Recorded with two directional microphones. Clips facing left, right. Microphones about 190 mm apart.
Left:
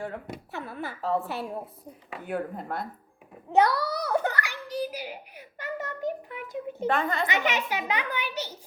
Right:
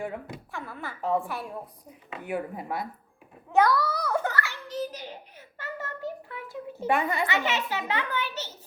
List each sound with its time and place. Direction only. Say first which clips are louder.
0.5 s speech: left 3 dB; 20° left (ahead or behind)
2.2 s speech: even; 5° right (ahead or behind)
3.5 s a sound: even; 20° left (ahead or behind)
6.8 s speech: right 1 dB; 15° right (ahead or behind)
7.3 s a child's voice: left 1 dB; 15° left (ahead or behind)